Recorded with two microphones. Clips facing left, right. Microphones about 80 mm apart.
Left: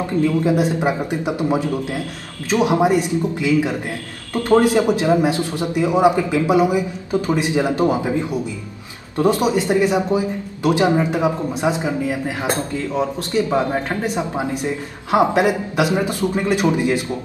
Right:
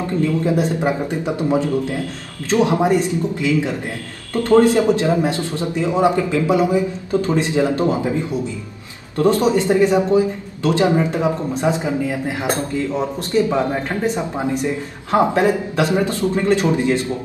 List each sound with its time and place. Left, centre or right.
0.0 s a man's voice: centre